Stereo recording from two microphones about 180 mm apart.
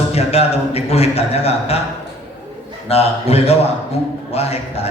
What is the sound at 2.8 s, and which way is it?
A man's voice, 35° left (ahead or behind).